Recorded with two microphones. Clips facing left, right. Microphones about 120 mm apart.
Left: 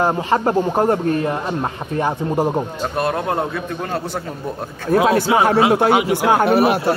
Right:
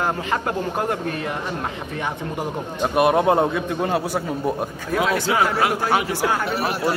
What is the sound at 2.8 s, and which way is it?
A man's voice, 15° right (ahead or behind).